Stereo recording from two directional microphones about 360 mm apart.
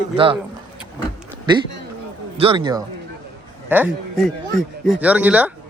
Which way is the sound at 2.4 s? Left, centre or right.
Centre.